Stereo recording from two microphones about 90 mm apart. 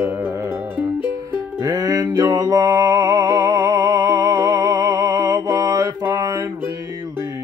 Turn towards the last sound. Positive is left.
turn(degrees=-35)  # may be behind; listen again after turning